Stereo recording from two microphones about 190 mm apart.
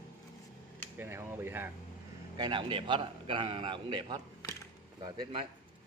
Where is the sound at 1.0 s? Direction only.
10° right (ahead or behind).